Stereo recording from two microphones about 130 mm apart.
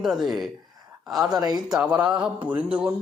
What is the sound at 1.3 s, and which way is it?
Speech, 30° right (ahead or behind).